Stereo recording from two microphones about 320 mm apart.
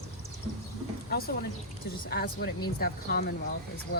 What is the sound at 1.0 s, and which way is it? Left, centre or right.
Speech, left.